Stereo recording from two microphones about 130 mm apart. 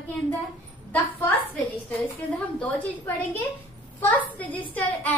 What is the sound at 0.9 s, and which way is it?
Speech, 15° left (ahead or behind).